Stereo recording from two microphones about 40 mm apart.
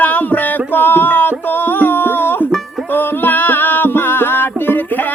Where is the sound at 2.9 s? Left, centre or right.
Left.